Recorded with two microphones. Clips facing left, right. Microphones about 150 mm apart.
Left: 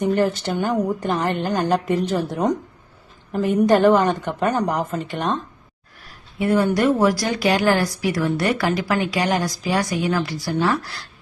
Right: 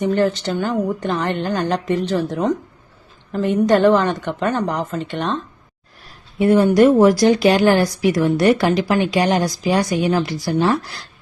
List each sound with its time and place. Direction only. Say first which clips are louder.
0.0 s a woman's voice: right 2 dB; 10° left (ahead or behind)
6.4 s speech: right 6 dB; 25° right (ahead or behind)